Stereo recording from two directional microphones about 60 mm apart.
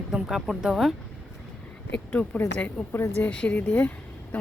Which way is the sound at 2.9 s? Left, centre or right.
Left.